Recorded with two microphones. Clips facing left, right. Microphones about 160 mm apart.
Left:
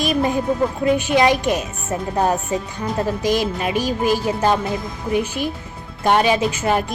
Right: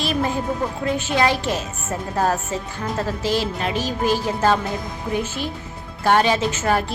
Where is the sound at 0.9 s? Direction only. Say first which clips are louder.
Left 2 dB; 15° left (ahead or behind).